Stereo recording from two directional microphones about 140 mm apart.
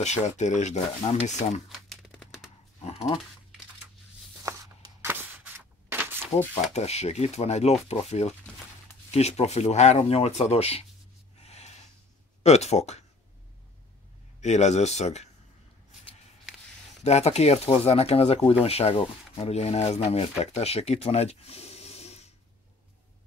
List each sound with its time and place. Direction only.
0.0 s speech: 55° left (ahead or behind)
1.7 s crumpling: centre (ahead or behind)
2.8 s a sound: 45° left (ahead or behind)
4.5 s a sound: 20° right (ahead or behind)
6.7 s speech: 50° left (ahead or behind)
11.4 s gasp: 50° left (ahead or behind)
12.4 s speech: 50° left (ahead or behind)
14.4 s speech: 55° left (ahead or behind)
17.0 s speech: 50° left (ahead or behind)